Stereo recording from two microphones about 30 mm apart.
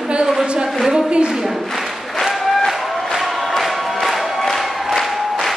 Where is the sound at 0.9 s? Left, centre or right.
Right.